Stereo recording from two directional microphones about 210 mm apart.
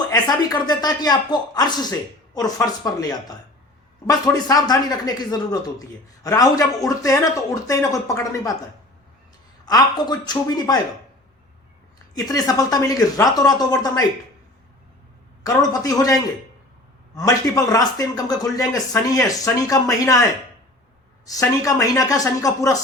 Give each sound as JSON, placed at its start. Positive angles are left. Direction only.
{"t": 0.1, "sound": "speech", "side_deg": 20}
{"t": 9.6, "sound": "speech", "side_deg": 20}
{"t": 12.1, "sound": "speech", "side_deg": 15}
{"t": 15.4, "sound": "speech", "side_deg": 15}
{"t": 17.2, "sound": "speech", "side_deg": 15}
{"t": 21.3, "sound": "speech", "side_deg": 15}